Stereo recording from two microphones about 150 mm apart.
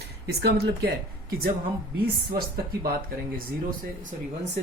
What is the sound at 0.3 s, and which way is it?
Speech, 90° right.